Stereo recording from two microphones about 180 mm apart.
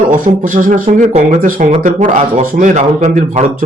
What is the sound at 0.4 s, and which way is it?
Speech, 45° right (ahead or behind).